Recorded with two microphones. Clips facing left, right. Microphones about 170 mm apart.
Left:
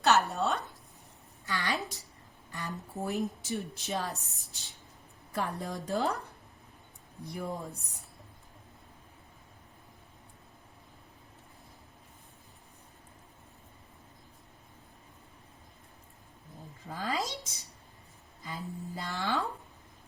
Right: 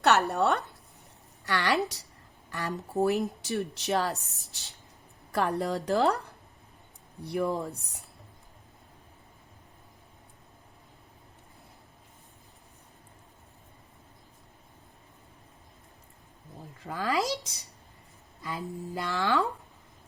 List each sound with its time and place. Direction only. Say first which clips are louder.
0.0 s speech: right 3 dB; 65° right (ahead or behind)
7.3 s speech: right 8 dB; 70° right (ahead or behind)
16.8 s speech: right 5 dB; 75° right (ahead or behind)
18.4 s speech: right 4 dB; 70° right (ahead or behind)